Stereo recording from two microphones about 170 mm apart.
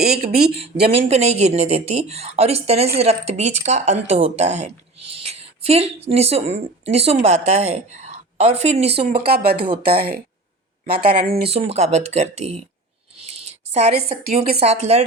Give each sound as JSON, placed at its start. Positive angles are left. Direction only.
{"t": 0.2, "sound": "speech", "side_deg": -65}
{"t": 0.9, "sound": "speech", "side_deg": -35}
{"t": 9.2, "sound": "speech", "side_deg": -65}
{"t": 11.4, "sound": "speech", "side_deg": -35}
{"t": 13.3, "sound": "a sound", "side_deg": -40}
{"t": 13.9, "sound": "speech", "side_deg": -60}
{"t": 14.6, "sound": "speech", "side_deg": -40}